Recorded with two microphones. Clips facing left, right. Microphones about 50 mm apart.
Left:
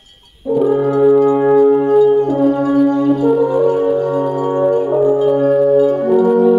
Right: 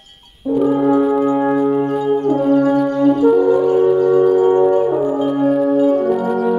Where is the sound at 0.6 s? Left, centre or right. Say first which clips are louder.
Left 2 dB; centre.